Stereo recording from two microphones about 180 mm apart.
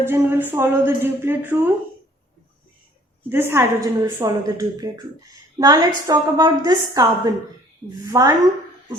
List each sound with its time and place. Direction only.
0.0 s a woman's voice: 10° right (ahead or behind)
3.2 s a woman's voice: 10° right (ahead or behind)